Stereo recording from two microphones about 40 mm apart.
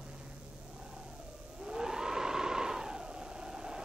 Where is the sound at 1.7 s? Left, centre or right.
Centre.